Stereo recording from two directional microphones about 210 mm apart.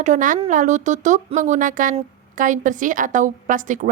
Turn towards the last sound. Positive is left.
turn(degrees=-40)  # may be behind; listen again after turning